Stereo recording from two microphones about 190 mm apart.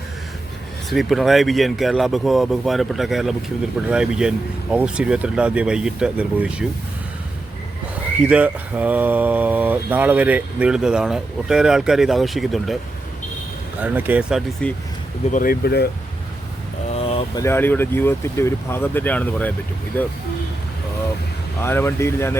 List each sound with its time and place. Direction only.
0.9 s speech: centre (ahead or behind)
8.2 s speech: 5° right (ahead or behind)
13.8 s speech: 10° right (ahead or behind)
15.3 s speech: 45° left (ahead or behind)
16.9 s vehicle: 30° left (ahead or behind)
17.4 s speech: 10° left (ahead or behind)
21.6 s speech: 15° left (ahead or behind)